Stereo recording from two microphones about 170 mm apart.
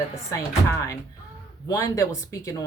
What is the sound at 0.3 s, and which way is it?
Speech, 15° left (ahead or behind).